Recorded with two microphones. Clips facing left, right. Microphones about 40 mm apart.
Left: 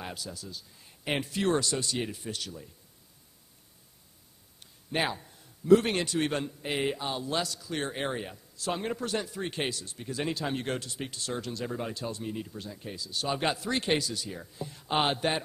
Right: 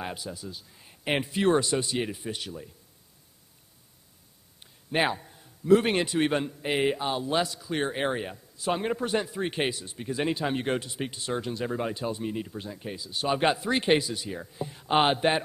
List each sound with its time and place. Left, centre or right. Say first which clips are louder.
0.0 s a man's voice: right 4 dB; right
4.9 s a man's voice: right 4 dB; centre